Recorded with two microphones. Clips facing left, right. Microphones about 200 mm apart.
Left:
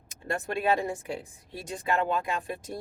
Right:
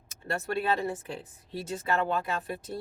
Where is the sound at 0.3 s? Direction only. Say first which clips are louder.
Left 2 dB; 15° left (ahead or behind).